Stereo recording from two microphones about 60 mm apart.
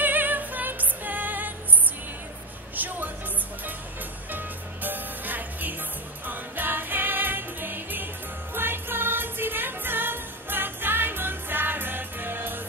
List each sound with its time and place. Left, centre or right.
0.0 s music: right
2.7 s music: right
4.3 s music: right